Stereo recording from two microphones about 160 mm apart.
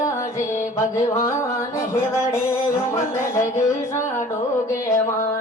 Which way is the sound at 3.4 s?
15° left (ahead or behind).